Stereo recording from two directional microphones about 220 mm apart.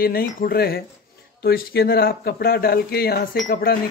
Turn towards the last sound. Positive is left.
turn(degrees=40)  # may be behind; listen again after turning